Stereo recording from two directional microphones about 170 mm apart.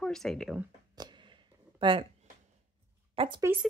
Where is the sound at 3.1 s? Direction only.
35° right (ahead or behind).